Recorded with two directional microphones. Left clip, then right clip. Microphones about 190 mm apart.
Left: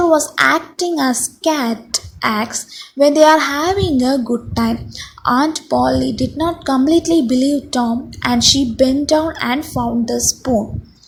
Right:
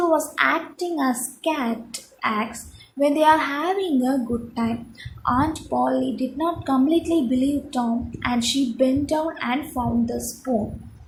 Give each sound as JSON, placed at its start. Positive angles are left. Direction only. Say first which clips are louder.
{"t": 0.0, "sound": "a woman's voice", "louder": "left 7 dB", "side_deg": 45}